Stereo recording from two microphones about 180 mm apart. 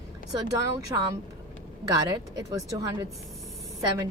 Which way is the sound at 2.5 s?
20° right (ahead or behind).